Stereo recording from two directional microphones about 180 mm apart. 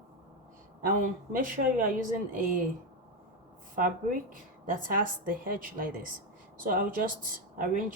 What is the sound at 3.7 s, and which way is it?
A woman's voice, 50° right (ahead or behind).